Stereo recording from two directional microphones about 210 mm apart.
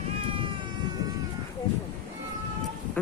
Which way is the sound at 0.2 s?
25° right (ahead or behind).